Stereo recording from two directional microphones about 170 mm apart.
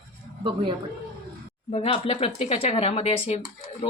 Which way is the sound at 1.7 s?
40° left (ahead or behind).